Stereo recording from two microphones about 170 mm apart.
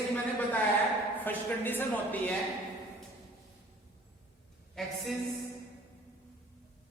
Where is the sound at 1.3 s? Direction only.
10° left (ahead or behind).